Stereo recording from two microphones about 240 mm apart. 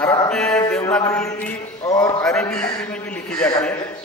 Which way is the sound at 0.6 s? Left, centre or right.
Centre.